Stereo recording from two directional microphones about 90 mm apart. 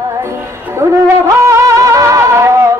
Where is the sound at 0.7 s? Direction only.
30° right (ahead or behind).